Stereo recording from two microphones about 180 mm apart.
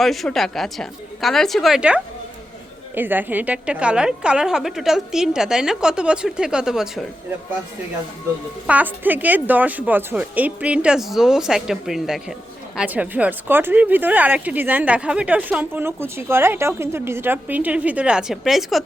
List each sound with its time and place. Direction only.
0.0 s a woman's voice: centre (ahead or behind)
8.6 s speech: 10° right (ahead or behind)